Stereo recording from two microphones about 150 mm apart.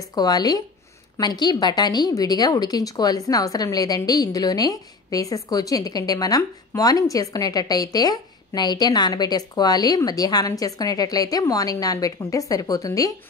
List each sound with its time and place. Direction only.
0.1 s a woman's voice: 25° left (ahead or behind)